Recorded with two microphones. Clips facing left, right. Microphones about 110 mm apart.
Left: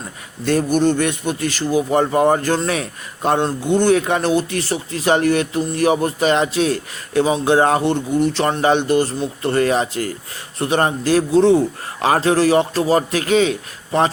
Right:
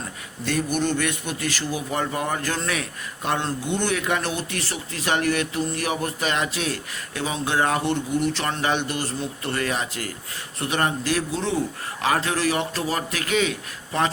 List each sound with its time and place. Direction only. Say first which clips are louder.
0.4 s a man's voice: left 8 dB; 35° left (ahead or behind)